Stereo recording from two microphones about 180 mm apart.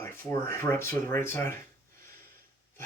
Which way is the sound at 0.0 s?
15° left (ahead or behind).